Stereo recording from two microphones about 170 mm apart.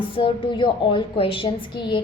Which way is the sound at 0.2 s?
30° left (ahead or behind).